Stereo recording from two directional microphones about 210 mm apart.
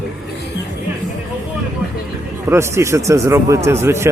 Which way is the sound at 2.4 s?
10° right (ahead or behind).